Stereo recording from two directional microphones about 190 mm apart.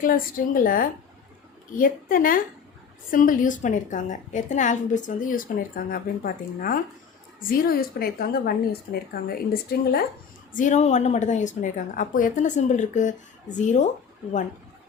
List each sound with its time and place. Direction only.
0.0 s a woman's voice: 45° left (ahead or behind)
10.5 s a woman's voice: 40° left (ahead or behind)